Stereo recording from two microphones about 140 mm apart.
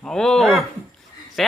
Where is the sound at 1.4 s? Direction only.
Centre (ahead or behind).